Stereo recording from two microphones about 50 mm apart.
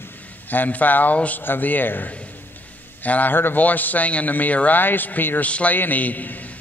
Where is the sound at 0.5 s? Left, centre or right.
Left.